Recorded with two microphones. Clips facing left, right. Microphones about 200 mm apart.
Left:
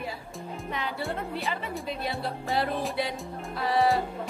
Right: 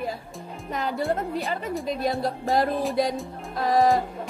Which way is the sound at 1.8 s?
40° right (ahead or behind).